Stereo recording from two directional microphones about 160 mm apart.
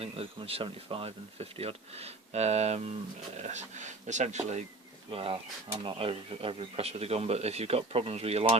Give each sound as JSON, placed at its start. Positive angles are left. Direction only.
{"t": 0.0, "sound": "speech", "side_deg": -35}
{"t": 5.1, "sound": "speech", "side_deg": -35}